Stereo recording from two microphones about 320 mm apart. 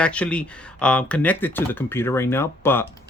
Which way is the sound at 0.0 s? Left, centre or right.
Centre.